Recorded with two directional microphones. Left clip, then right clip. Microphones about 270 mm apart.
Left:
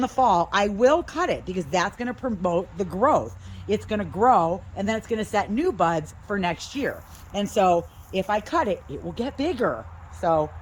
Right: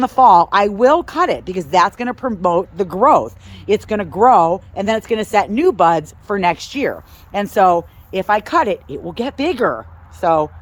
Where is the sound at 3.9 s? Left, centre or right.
Right.